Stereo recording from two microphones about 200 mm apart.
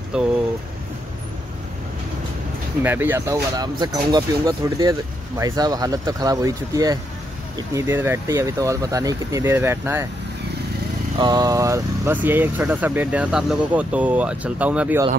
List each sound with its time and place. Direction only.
0.1 s speech: 5° right (ahead or behind)
2.8 s speech: 10° right (ahead or behind)
11.1 s speech: 20° right (ahead or behind)